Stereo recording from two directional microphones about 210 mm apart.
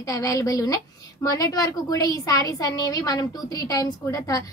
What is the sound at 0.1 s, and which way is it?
A woman's voice, 15° left (ahead or behind).